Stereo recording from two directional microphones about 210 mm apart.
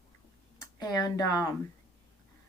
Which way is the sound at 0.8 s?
20° left (ahead or behind).